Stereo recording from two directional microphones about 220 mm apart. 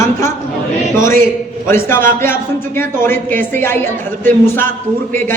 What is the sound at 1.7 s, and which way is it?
Speech, 10° left (ahead or behind).